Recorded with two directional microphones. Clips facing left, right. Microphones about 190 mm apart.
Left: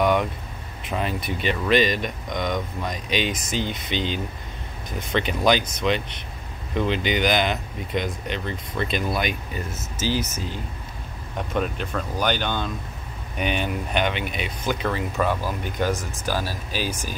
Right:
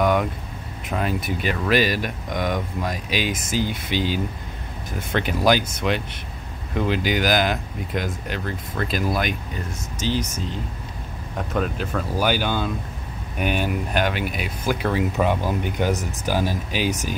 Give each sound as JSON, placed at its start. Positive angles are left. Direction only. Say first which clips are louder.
{"t": 0.0, "sound": "vehicle", "louder": "right 1 dB", "side_deg": 0}
{"t": 0.8, "sound": "speech", "louder": "right 2 dB", "side_deg": 0}